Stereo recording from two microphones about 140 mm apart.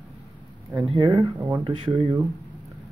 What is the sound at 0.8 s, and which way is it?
Speech, 30° right (ahead or behind).